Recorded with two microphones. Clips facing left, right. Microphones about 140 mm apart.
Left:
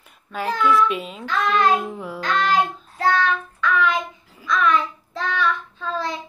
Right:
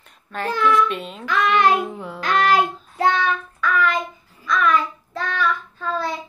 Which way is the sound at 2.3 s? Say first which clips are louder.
Right 3 dB; 70° right (ahead or behind).